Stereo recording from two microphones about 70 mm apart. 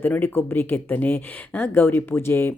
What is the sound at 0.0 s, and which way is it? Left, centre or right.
Speech, left.